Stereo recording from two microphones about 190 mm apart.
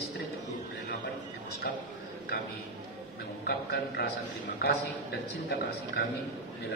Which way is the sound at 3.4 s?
55° left (ahead or behind).